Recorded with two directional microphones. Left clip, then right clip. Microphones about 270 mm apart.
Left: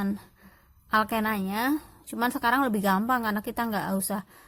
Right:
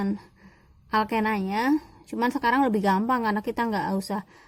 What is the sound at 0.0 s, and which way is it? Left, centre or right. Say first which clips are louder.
A woman's voice: right 2 dB; left.